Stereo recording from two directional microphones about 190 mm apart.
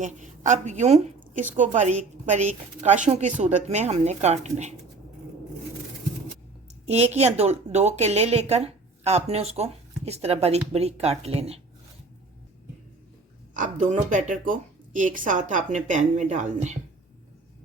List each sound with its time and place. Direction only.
0.0 s a woman's voice: 40° right (ahead or behind)
6.8 s a woman's voice: 35° right (ahead or behind)
13.6 s a woman's voice: 45° right (ahead or behind)